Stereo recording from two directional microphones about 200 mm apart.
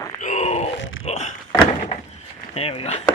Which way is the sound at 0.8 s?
75° left (ahead or behind).